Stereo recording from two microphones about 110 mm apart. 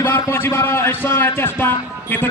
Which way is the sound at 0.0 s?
20° left (ahead or behind).